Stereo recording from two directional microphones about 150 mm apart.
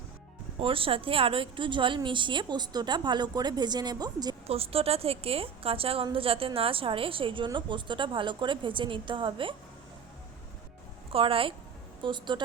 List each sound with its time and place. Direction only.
0.6 s a woman's voice: 35° right (ahead or behind)
4.4 s a woman's voice: 40° right (ahead or behind)
11.1 s a woman's voice: 35° right (ahead or behind)